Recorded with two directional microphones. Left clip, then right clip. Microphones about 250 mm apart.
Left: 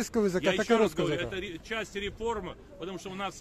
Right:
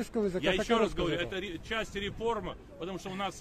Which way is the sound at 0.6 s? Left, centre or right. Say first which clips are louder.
Left 3 dB; centre.